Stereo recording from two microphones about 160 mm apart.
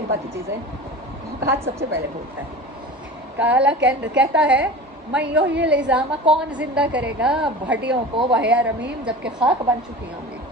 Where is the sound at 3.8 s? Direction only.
90° right.